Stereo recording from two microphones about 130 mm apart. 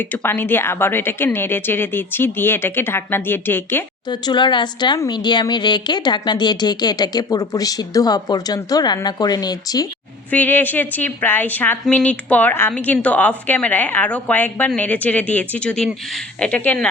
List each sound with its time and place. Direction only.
0.0 s a woman's voice: 15° left (ahead or behind)
4.1 s speech: 35° left (ahead or behind)
10.3 s a woman's voice: 15° left (ahead or behind)